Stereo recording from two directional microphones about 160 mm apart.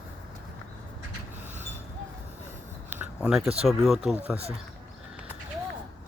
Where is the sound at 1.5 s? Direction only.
45° right (ahead or behind).